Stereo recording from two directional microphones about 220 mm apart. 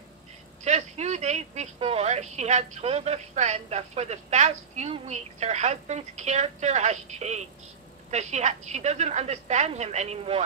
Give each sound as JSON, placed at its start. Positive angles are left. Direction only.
{"t": 0.7, "sound": "a woman's voice", "side_deg": -30}